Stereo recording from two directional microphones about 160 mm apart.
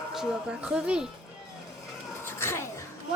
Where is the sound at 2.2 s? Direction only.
15° left (ahead or behind).